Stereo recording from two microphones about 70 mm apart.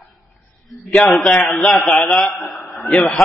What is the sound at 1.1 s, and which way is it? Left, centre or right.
Speech, centre.